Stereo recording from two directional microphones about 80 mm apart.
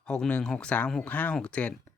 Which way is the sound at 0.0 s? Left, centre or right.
Centre.